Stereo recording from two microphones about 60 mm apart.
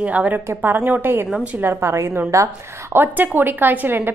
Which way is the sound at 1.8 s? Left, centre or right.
Right.